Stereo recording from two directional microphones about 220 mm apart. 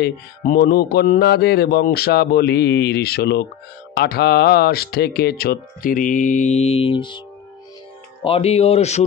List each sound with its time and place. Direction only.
0.0 s speech: 40° left (ahead or behind); by 7.2 s 20° left (ahead or behind)
8.2 s speech: 25° left (ahead or behind)